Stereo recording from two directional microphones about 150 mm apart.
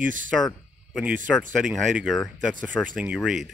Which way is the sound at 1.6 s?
5° right (ahead or behind).